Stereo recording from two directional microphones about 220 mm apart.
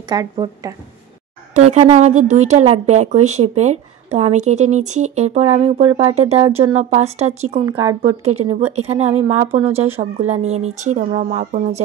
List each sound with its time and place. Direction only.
0.1 s speech: 15° right (ahead or behind)
1.5 s a woman's voice: 30° right (ahead or behind)
7.6 s speech: 15° right (ahead or behind)
8.2 s a woman's voice: 30° right (ahead or behind)